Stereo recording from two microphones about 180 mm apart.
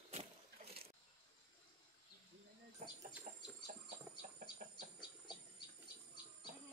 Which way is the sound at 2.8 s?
45° right (ahead or behind).